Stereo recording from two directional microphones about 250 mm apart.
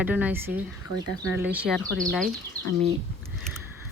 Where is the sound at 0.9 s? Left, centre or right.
Left.